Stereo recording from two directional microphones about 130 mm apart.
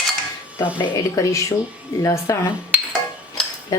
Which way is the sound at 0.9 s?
25° left (ahead or behind).